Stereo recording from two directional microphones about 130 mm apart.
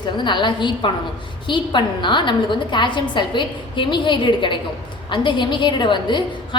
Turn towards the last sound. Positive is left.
turn(degrees=35)  # may be behind; listen again after turning